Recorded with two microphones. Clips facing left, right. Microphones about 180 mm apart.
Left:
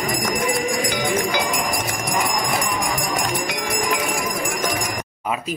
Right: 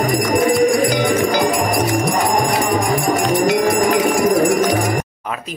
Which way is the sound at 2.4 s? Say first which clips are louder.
Right 6 dB; 50° right (ahead or behind).